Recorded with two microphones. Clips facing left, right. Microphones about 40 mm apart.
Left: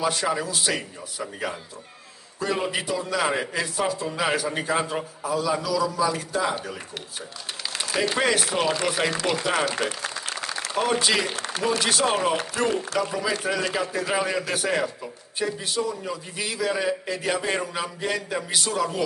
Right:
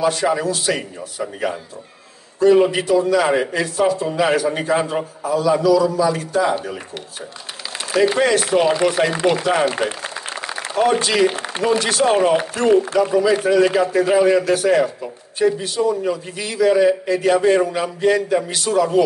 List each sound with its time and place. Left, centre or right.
0.0 s a man's voice: centre
2.7 s a man's voice: centre
7.9 s speech: centre
8.2 s a man's voice: centre
8.6 s a man's voice: centre
9.4 s a man's voice: centre
9.8 s a sound: right
11.0 s a man's voice: centre
11.2 s a man's voice: right
11.6 s a man's voice: centre
13.3 s a man's voice: centre
15.8 s speech: right
16.1 s a man's voice: centre